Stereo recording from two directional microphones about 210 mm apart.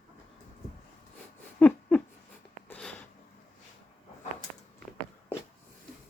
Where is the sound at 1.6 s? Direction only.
5° left (ahead or behind).